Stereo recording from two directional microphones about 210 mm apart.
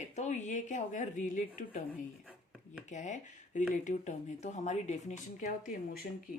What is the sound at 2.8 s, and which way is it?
Speech, 35° left (ahead or behind).